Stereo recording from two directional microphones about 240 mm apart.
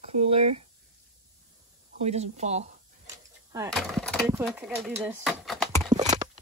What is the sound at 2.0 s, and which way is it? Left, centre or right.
Speech, right.